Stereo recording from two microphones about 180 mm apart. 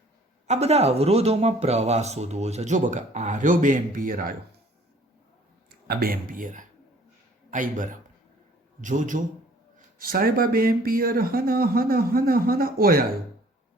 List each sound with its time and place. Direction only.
0.4 s speech: 35° right (ahead or behind); by 4.4 s 55° right (ahead or behind)
5.9 s a man's voice: 55° right (ahead or behind)